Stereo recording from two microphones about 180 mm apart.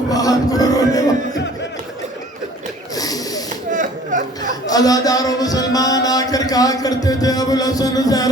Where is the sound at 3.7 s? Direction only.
45° right (ahead or behind).